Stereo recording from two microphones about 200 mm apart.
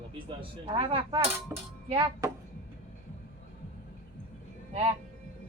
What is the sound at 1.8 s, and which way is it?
Speech, 25° right (ahead or behind).